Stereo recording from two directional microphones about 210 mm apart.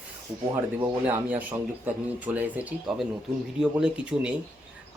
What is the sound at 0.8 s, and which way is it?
Speech, 10° right (ahead or behind).